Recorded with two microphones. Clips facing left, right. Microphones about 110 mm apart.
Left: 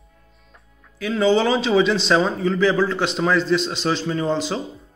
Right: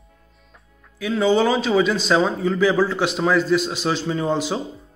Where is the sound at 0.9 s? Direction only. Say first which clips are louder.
Even; 5° right (ahead or behind).